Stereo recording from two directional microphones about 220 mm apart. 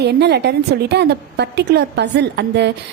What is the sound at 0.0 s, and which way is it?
A woman's voice, 50° right (ahead or behind).